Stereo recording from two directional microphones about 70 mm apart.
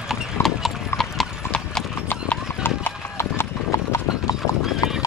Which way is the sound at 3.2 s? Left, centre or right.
Left.